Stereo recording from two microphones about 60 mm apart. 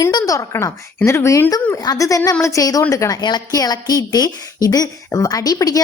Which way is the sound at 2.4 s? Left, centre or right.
Left.